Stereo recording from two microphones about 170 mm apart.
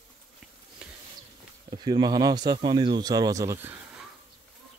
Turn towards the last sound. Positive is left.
turn(degrees=-15)  # may be behind; listen again after turning